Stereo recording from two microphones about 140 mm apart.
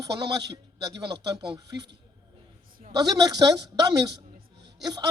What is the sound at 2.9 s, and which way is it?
A man's voice, 30° right (ahead or behind).